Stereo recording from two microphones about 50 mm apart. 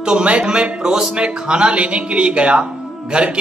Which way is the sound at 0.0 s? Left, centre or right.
Right.